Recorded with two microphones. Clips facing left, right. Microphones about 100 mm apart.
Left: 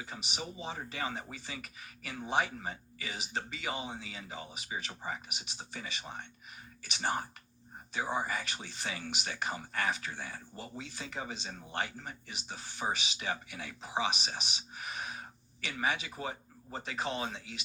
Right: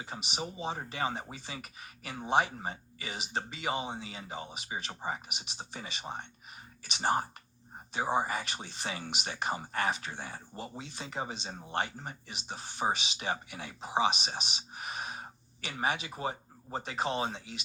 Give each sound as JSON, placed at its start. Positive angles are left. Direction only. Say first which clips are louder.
{"t": 0.0, "sound": "speech", "louder": "right 3 dB", "side_deg": -25}